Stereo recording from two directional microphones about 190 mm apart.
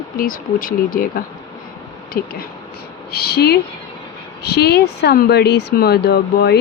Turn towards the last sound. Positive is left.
turn(degrees=60)  # may be behind; listen again after turning